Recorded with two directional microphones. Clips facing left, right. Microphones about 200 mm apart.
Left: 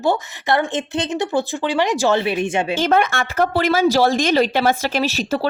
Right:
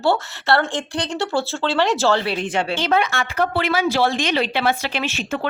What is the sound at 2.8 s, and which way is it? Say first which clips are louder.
Speech: left 4 dB; 50° left (ahead or behind).